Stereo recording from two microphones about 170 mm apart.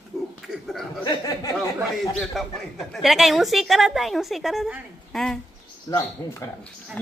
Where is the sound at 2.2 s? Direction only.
Centre (ahead or behind).